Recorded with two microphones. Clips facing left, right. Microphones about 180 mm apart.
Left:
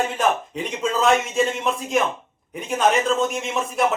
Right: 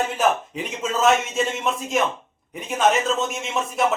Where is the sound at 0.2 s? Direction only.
5° right (ahead or behind).